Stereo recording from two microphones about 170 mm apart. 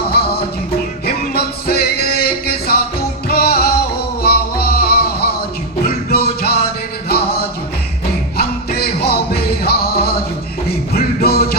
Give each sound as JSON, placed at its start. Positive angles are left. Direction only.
{"t": 0.1, "sound": "music", "side_deg": 65}